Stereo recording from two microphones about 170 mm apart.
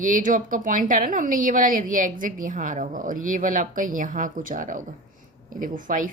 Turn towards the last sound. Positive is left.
turn(degrees=-55)  # may be behind; listen again after turning